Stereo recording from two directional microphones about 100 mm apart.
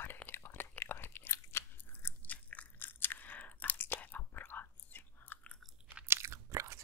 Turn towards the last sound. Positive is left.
turn(degrees=-30)  # may be behind; listen again after turning